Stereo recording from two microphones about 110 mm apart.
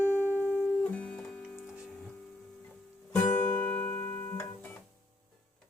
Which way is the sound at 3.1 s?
15° left (ahead or behind).